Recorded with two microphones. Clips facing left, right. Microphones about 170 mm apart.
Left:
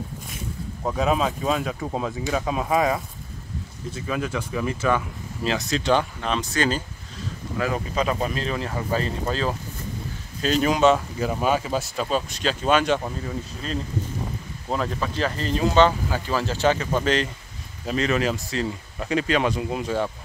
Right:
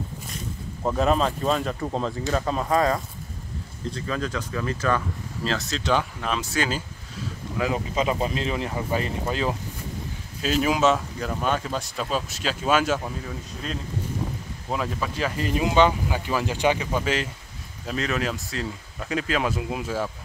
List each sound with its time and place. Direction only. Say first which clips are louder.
0.8 s speech: right 1 dB; centre (ahead or behind)
5.7 s speech: left 4 dB; centre (ahead or behind); by 9.6 s 15° right (ahead or behind)
10.4 s speech: left 2 dB; 5° right (ahead or behind)
14.7 s speech: left 2 dB; 5° right (ahead or behind)